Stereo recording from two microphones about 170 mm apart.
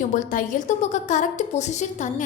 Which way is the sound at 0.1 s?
50° left (ahead or behind).